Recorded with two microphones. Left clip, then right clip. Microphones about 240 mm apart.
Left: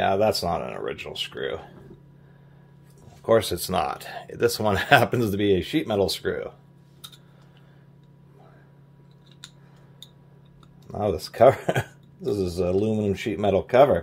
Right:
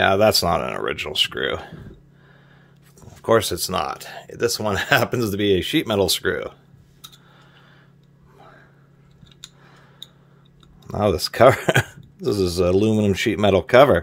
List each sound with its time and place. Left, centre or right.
0.0 s speech: right
3.2 s speech: right
10.9 s speech: right